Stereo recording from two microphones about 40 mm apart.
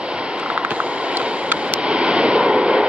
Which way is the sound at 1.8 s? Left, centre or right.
Right.